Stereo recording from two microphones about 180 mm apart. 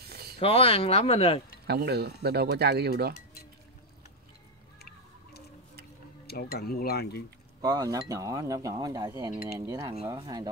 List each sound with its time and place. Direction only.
0.0 s a sound: 60° right (ahead or behind)
0.4 s speech: 35° left (ahead or behind)
1.7 s speech: 65° right (ahead or behind)
4.7 s music: 60° left (ahead or behind)
6.2 s speech: 55° left (ahead or behind)
7.6 s chink: 20° right (ahead or behind)